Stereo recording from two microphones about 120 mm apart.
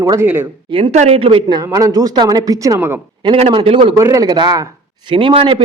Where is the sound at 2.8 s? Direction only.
15° right (ahead or behind).